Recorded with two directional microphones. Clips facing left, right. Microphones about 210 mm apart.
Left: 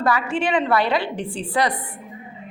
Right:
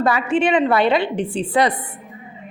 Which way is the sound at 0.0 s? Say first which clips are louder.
Right 4 dB; 20° right (ahead or behind).